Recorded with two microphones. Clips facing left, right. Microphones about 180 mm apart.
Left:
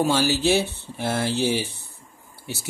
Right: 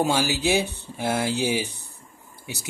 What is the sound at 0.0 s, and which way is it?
Speech, 15° right (ahead or behind).